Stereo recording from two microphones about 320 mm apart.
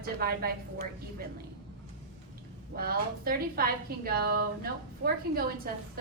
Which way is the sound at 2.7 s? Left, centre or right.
Right.